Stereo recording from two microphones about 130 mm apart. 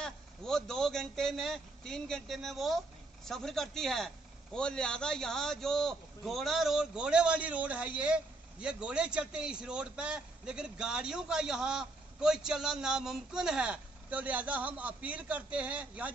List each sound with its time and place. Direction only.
0.0 s a man's voice: 5° left (ahead or behind); by 16.1 s 10° right (ahead or behind)